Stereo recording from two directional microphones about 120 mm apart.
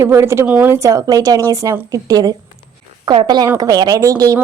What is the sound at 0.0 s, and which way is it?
Speech, 20° right (ahead or behind).